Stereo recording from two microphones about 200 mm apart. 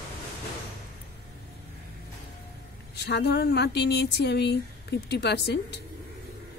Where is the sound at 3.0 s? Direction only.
55° left (ahead or behind).